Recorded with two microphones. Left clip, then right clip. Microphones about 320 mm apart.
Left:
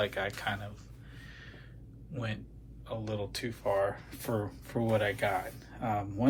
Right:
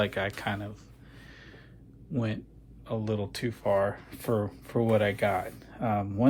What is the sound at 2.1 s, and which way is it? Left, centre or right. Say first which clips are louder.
A man's voice: right 6 dB; centre.